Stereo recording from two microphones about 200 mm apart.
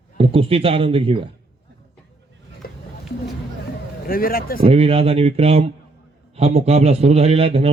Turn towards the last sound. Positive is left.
turn(degrees=-30)  # may be behind; listen again after turning